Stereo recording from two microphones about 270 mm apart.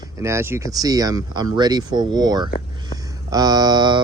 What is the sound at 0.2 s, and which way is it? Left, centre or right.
Speech, centre.